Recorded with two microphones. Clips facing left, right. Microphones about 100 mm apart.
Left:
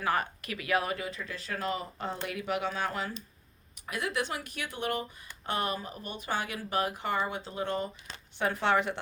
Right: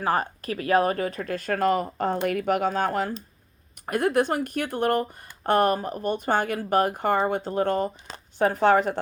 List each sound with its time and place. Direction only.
0.0 s speech: 35° right (ahead or behind)